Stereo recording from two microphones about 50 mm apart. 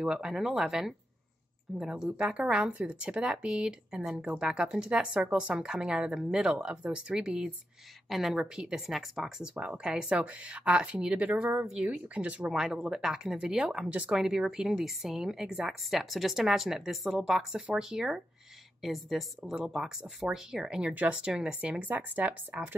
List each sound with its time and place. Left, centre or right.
0.0 s a woman's voice: centre
8.1 s speech: centre
8.5 s a woman's voice: centre
8.8 s speech: centre
9.4 s a woman's voice: centre
10.2 s speech: right
12.4 s a woman's voice: centre
13.8 s speech: right
14.1 s a woman's voice: centre
20.9 s speech: right
21.2 s a woman's voice: centre
21.5 s speech: right